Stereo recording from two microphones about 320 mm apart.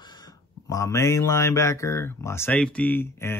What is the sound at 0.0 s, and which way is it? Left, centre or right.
Speech, centre.